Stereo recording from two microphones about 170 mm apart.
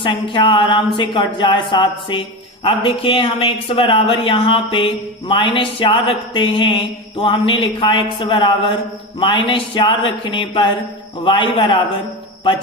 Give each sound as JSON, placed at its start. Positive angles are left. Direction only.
{"t": 0.0, "sound": "a man's voice", "side_deg": 30}